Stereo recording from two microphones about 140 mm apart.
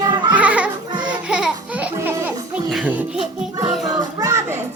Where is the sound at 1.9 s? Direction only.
15° right (ahead or behind).